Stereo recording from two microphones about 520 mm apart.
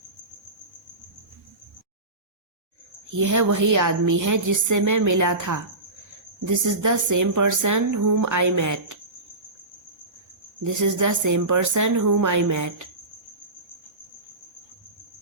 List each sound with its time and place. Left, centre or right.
3.1 s a woman's voice: right
10.6 s a woman's voice: right